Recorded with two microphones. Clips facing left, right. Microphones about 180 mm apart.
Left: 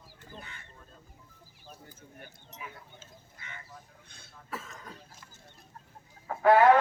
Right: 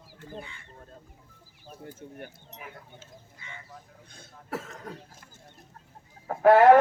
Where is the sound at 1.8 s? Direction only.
60° right (ahead or behind).